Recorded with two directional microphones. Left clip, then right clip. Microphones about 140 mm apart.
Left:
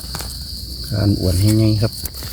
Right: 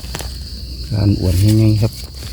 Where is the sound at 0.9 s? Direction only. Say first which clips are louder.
Right 1 dB; 15° right (ahead or behind).